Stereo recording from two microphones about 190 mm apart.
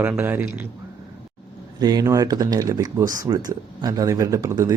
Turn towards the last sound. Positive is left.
turn(degrees=-15)  # may be behind; listen again after turning